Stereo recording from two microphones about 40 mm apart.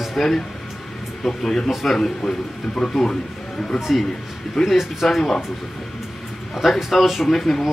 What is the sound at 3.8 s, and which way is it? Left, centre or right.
Speech, centre.